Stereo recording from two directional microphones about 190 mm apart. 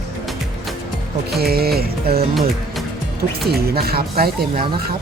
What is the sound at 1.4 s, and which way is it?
Speech, 55° right (ahead or behind).